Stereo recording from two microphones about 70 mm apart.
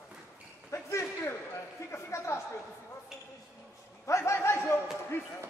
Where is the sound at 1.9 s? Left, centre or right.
Left.